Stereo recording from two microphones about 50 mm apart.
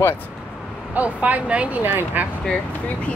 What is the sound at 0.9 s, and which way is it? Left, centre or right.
Speech, right.